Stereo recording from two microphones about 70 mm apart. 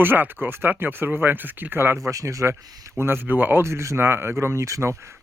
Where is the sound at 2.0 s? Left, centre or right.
Right.